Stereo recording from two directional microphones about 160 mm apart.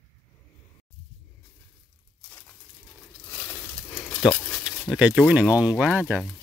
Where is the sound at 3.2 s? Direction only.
15° left (ahead or behind).